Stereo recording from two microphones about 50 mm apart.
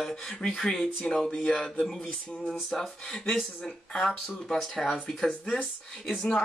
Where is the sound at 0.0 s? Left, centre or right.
Centre.